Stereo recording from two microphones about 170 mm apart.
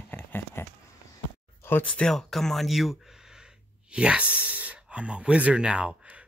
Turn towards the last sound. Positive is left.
turn(degrees=-5)  # may be behind; listen again after turning